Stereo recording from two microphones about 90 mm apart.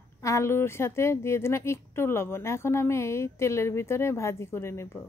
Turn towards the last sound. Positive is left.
turn(degrees=30)  # may be behind; listen again after turning